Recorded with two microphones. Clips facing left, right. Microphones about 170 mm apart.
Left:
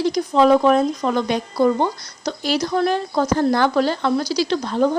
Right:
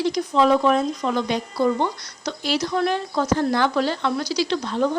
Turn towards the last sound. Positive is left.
turn(degrees=40)  # may be behind; listen again after turning